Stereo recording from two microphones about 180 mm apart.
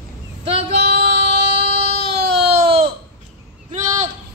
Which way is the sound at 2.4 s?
30° right (ahead or behind).